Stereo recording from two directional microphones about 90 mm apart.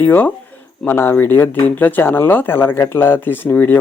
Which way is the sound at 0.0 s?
20° left (ahead or behind).